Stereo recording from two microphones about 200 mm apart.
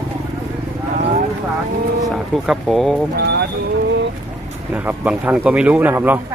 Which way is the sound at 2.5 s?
Centre (ahead or behind).